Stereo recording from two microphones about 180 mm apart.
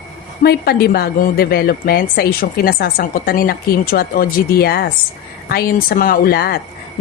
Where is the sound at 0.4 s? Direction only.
60° left (ahead or behind).